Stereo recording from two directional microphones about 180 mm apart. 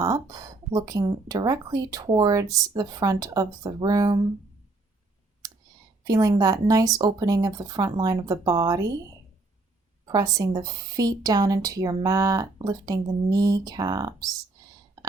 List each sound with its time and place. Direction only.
0.0 s speech: 20° right (ahead or behind)
6.1 s speech: 20° right (ahead or behind)
10.1 s speech: 20° right (ahead or behind)